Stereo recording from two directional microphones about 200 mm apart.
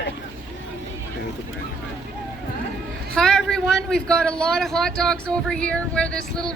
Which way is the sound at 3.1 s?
Centre (ahead or behind).